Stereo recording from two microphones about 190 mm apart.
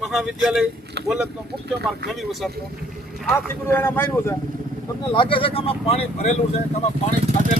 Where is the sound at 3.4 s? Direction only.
10° left (ahead or behind).